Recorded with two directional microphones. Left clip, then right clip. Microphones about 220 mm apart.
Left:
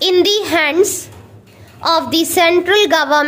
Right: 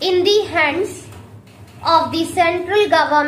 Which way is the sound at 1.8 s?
50° left (ahead or behind).